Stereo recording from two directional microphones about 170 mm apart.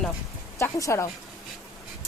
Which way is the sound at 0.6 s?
20° left (ahead or behind).